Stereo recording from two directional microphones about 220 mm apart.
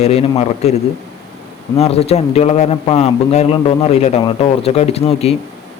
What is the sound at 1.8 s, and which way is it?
A man's voice, 25° left (ahead or behind).